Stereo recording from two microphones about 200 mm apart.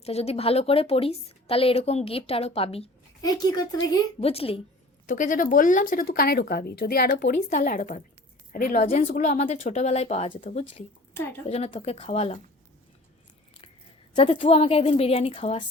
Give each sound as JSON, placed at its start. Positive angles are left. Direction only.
{"t": 0.0, "sound": "a woman's voice", "side_deg": 30}
{"t": 3.2, "sound": "a woman's voice", "side_deg": 20}
{"t": 4.2, "sound": "a woman's voice", "side_deg": 30}
{"t": 5.0, "sound": "speech", "side_deg": 40}
{"t": 7.5, "sound": "a woman's voice", "side_deg": 40}
{"t": 11.1, "sound": "a woman's voice", "side_deg": 10}
{"t": 11.4, "sound": "a woman's voice", "side_deg": 30}
{"t": 14.1, "sound": "a woman's voice", "side_deg": 25}